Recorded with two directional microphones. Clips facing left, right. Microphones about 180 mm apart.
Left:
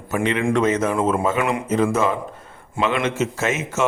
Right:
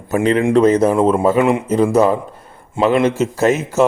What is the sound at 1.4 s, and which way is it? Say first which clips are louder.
A man's voice: right 6 dB; 25° right (ahead or behind).